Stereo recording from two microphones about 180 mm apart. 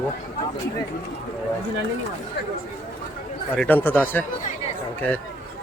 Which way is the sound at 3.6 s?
10° left (ahead or behind).